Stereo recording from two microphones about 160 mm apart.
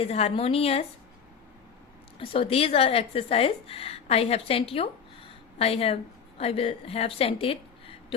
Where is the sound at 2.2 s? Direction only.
35° left (ahead or behind).